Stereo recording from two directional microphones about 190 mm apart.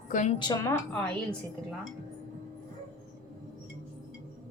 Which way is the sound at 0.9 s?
5° left (ahead or behind).